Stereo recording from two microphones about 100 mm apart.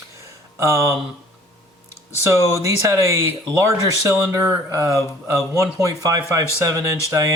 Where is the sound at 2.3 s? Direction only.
30° right (ahead or behind).